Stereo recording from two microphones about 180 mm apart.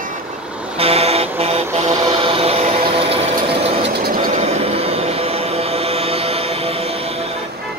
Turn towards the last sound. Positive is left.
turn(degrees=-35)  # may be behind; listen again after turning